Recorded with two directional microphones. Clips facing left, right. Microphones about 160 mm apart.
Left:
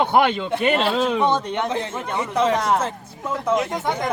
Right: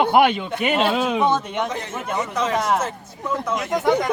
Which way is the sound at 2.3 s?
30° left (ahead or behind).